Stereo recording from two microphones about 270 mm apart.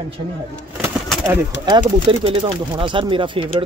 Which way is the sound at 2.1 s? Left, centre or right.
Centre.